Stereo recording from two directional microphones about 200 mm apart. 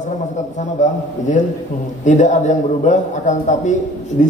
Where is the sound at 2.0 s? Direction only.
35° left (ahead or behind).